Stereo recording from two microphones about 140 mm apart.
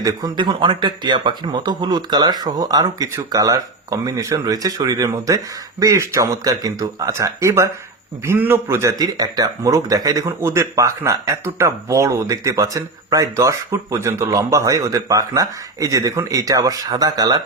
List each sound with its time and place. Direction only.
0.0 s speech: 25° right (ahead or behind)